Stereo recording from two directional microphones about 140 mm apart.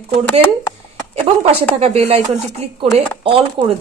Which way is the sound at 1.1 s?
45° right (ahead or behind).